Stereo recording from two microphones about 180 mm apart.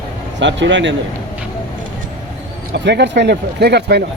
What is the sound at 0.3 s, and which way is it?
Speech, 85° right.